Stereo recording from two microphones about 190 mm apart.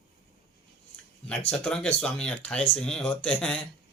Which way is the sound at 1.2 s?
5° left (ahead or behind).